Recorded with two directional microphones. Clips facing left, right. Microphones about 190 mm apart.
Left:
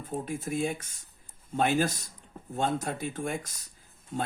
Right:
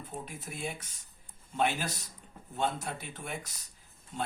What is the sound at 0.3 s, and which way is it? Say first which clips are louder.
Speech: left 12 dB; 45° left (ahead or behind).